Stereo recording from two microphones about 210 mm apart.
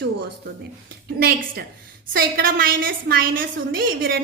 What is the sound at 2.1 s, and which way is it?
A woman's voice, 45° right (ahead or behind).